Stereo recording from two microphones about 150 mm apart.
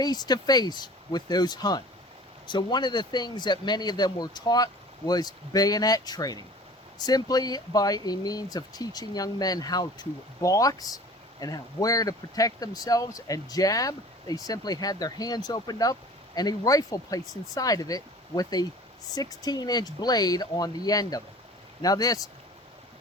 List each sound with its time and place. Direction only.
0.0 s speech: 25° left (ahead or behind)